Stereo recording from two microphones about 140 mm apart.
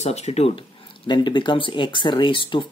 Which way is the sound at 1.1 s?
35° left (ahead or behind).